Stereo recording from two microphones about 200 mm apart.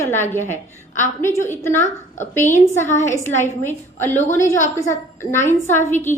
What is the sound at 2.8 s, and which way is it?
Speech, 40° left (ahead or behind).